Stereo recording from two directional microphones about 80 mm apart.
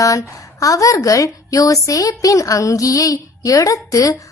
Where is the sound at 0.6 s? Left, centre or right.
Left.